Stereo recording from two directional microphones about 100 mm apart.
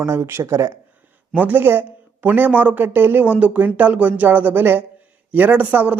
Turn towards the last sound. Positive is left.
turn(degrees=-15)  # may be behind; listen again after turning